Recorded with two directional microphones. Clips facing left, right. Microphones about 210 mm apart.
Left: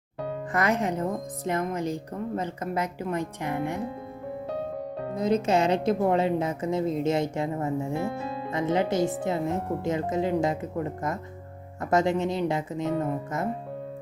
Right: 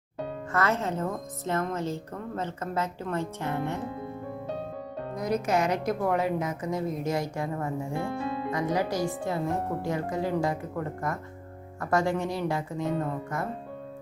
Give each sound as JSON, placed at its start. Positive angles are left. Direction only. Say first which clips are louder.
{"t": 0.5, "sound": "a woman's voice", "louder": "left 2 dB", "side_deg": 15}
{"t": 5.1, "sound": "speech", "louder": "left 3 dB", "side_deg": 25}
{"t": 8.0, "sound": "speech", "louder": "left 1 dB", "side_deg": 5}
{"t": 8.4, "sound": "speech", "louder": "left 4 dB", "side_deg": 25}